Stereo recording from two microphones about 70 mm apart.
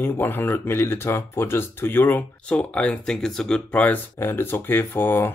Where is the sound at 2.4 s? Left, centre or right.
Centre.